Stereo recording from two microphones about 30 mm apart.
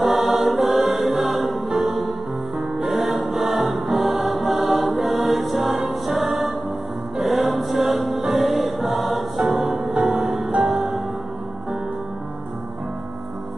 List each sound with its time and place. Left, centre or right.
0.0 s music: centre
1.7 s music: centre
2.8 s music: centre